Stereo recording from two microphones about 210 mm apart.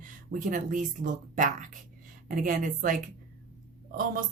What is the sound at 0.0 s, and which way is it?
Speech, 40° right (ahead or behind).